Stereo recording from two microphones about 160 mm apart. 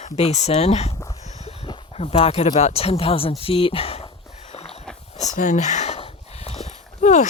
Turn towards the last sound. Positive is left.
turn(degrees=45)  # may be behind; listen again after turning